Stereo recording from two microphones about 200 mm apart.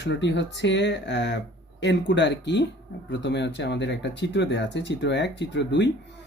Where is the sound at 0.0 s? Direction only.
65° left (ahead or behind).